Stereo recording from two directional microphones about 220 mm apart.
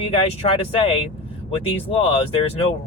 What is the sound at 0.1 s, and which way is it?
Speech, 25° left (ahead or behind).